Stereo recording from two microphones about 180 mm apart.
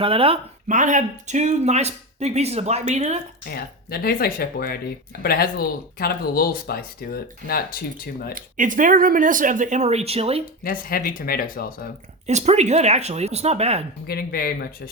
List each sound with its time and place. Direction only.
0.0 s speech: 30° right (ahead or behind)
0.7 s speech: 45° right (ahead or behind)
3.5 s speech: 55° left (ahead or behind)
8.4 s speech: 45° right (ahead or behind)
10.6 s speech: 50° left (ahead or behind)
12.2 s speech: 40° right (ahead or behind)
14.1 s speech: 55° left (ahead or behind)